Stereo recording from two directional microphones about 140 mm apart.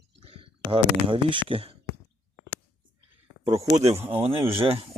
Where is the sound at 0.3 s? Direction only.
40° right (ahead or behind).